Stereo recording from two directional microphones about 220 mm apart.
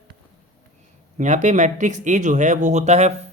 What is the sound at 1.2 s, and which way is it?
Speech, 35° right (ahead or behind).